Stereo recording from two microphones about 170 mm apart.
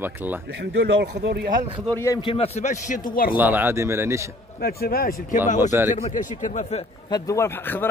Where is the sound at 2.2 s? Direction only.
35° left (ahead or behind).